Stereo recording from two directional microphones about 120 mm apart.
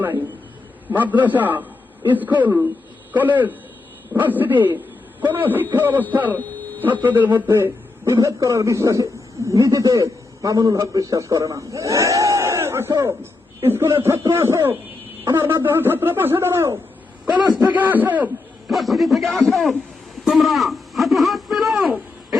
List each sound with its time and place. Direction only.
0.9 s a man's voice: 15° right (ahead or behind)
18.7 s a man's voice: centre (ahead or behind)